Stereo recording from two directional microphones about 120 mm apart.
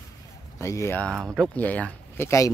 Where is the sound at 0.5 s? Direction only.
25° left (ahead or behind).